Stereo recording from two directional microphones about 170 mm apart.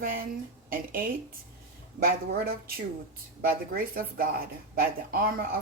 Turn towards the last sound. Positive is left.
turn(degrees=-60)  # may be behind; listen again after turning